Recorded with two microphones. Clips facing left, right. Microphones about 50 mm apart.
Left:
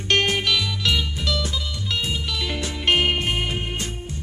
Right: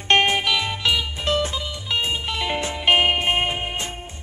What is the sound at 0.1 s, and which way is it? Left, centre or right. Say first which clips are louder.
Music: right 2 dB; right.